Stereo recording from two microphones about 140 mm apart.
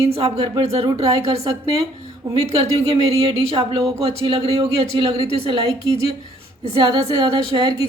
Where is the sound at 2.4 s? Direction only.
45° right (ahead or behind).